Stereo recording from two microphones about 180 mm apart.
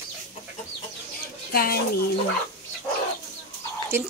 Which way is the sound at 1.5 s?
55° left (ahead or behind).